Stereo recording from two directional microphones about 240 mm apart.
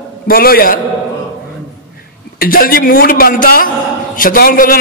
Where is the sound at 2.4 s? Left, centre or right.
Left.